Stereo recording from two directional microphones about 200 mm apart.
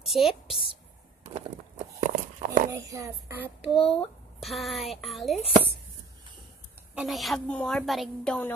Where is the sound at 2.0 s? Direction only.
40° right (ahead or behind).